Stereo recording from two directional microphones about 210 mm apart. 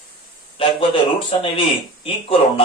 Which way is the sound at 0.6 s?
25° left (ahead or behind).